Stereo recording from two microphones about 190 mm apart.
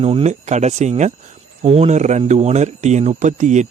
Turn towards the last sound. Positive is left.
turn(degrees=-40)  # may be behind; listen again after turning